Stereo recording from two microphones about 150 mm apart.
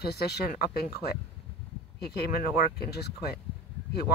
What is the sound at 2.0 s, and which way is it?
Speech, 90° left.